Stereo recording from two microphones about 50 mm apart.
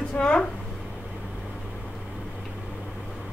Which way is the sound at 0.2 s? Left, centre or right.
Left.